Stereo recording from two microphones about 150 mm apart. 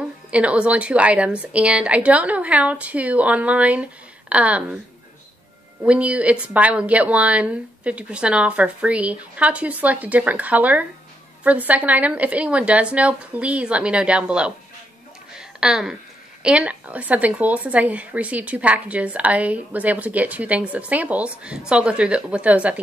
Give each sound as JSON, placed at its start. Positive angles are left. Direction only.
{"t": 0.3, "sound": "a woman's voice", "side_deg": -10}
{"t": 5.9, "sound": "a woman's voice", "side_deg": -10}
{"t": 15.3, "sound": "a sound", "side_deg": -5}
{"t": 16.4, "sound": "a woman's voice", "side_deg": -10}